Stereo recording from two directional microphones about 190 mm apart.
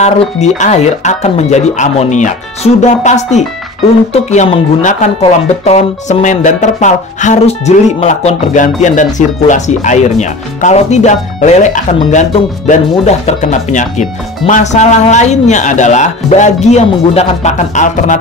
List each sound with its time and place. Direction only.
0.0 s speech: 35° left (ahead or behind)